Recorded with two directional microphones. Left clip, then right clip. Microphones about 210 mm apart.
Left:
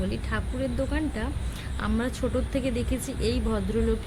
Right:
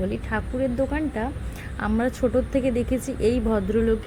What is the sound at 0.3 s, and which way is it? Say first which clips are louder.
Speech: right 6 dB; 5° right (ahead or behind).